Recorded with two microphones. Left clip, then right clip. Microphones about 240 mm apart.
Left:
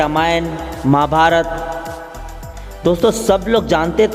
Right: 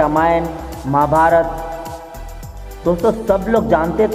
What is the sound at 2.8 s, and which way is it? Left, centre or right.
Speech, left.